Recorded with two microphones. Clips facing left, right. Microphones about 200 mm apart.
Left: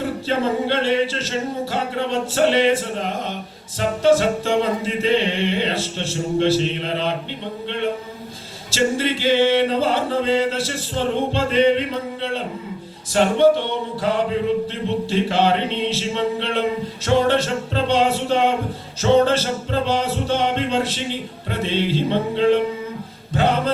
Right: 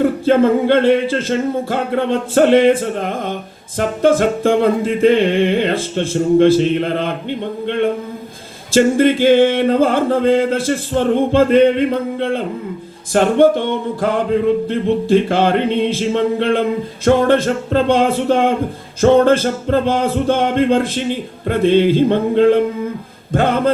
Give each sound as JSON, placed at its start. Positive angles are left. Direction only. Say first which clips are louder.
{"t": 0.0, "sound": "music", "louder": "right 9 dB", "side_deg": -50}